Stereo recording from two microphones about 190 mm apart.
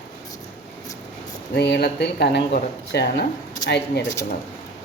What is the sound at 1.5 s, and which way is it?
Speech, 60° left (ahead or behind).